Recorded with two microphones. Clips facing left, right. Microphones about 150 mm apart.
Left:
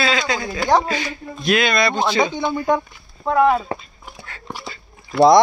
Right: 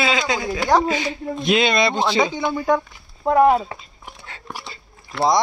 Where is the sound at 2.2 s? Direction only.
10° right (ahead or behind).